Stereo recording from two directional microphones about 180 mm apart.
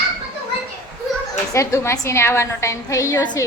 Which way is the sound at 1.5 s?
15° left (ahead or behind).